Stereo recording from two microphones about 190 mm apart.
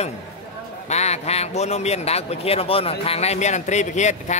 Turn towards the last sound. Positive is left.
turn(degrees=40)  # may be behind; listen again after turning